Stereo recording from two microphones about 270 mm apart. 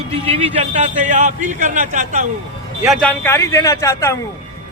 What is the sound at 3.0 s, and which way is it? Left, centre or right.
Speech, centre.